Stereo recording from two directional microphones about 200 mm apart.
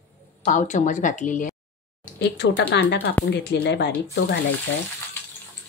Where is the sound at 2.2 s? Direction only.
60° left (ahead or behind).